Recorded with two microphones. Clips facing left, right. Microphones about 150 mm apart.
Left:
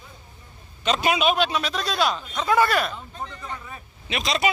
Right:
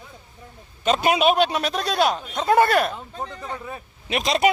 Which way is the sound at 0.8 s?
45° right (ahead or behind).